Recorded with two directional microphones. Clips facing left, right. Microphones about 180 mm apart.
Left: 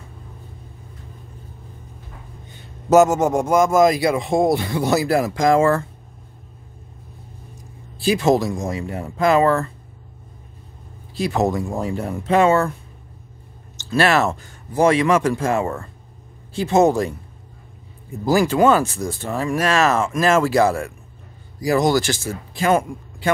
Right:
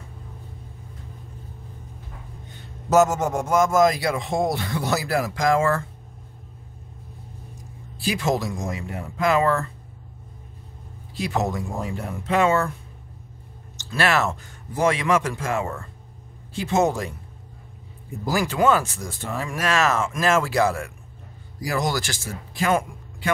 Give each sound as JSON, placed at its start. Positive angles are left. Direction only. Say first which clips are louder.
{"t": 2.9, "sound": "a man's voice", "louder": "left 5 dB", "side_deg": 15}
{"t": 8.0, "sound": "speech", "louder": "left 7 dB", "side_deg": 30}
{"t": 11.5, "sound": "speech", "louder": "left 5 dB", "side_deg": 35}
{"t": 13.7, "sound": "speech", "louder": "left 5 dB", "side_deg": 30}
{"t": 18.2, "sound": "speech", "louder": "left 5 dB", "side_deg": 30}